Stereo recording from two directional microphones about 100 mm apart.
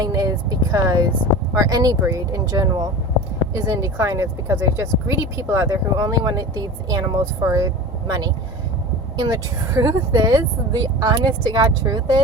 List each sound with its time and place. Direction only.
0.0 s speech: 35° right (ahead or behind)
3.5 s speech: 30° right (ahead or behind)
5.6 s speech: 40° right (ahead or behind)
9.3 s speech: 35° right (ahead or behind)